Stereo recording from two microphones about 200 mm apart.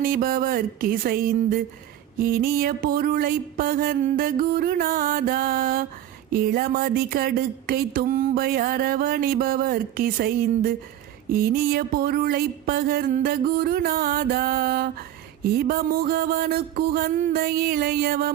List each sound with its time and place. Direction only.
0.0 s speech: 45° right (ahead or behind)